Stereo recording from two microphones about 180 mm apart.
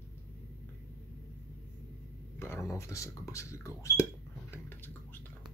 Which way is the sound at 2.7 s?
15° left (ahead or behind).